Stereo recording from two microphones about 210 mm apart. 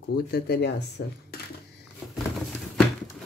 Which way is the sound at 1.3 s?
45° left (ahead or behind).